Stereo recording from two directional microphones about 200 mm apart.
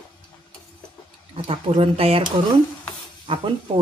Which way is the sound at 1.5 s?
30° right (ahead or behind).